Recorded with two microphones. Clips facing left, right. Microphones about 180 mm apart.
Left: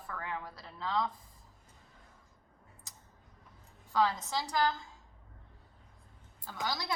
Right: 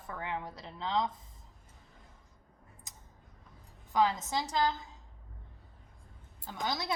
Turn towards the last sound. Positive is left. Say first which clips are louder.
# right 2 dB
turn(degrees=-20)  # may be behind; listen again after turning